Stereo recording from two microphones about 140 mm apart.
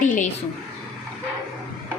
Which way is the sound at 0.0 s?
65° left (ahead or behind).